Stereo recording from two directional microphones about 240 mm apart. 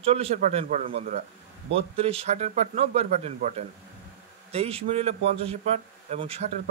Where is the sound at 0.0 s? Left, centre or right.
Right.